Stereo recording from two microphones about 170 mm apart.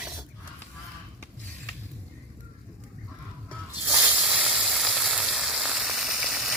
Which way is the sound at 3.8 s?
10° right (ahead or behind).